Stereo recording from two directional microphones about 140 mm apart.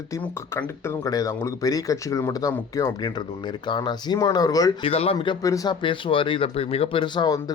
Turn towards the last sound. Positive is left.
turn(degrees=30)  # may be behind; listen again after turning